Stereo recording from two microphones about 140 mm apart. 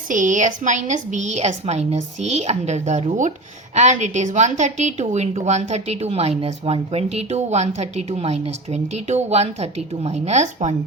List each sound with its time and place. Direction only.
0.1 s a woman's voice: 65° right (ahead or behind)